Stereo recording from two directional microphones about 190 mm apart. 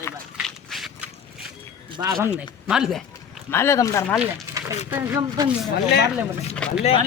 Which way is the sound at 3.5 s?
15° left (ahead or behind).